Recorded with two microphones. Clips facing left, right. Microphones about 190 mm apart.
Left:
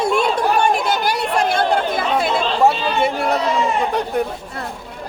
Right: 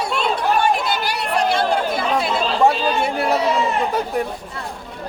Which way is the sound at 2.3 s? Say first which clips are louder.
Even; centre (ahead or behind).